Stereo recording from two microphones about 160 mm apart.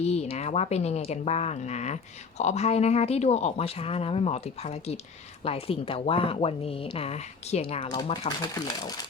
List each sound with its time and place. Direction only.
0.0 s speech: 40° left (ahead or behind)